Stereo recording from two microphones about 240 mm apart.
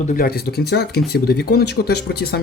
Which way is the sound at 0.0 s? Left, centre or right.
Left.